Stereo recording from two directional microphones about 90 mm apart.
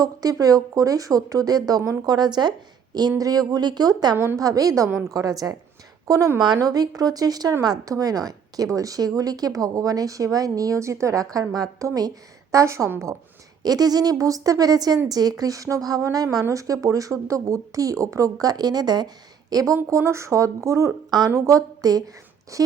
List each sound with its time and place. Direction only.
0.0 s speech: 45° right (ahead or behind)
3.1 s a woman's voice: 40° right (ahead or behind)
13.6 s a woman's voice: 45° right (ahead or behind)